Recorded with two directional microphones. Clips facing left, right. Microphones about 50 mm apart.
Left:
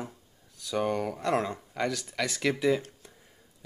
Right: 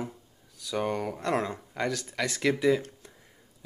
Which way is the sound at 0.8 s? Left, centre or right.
Centre.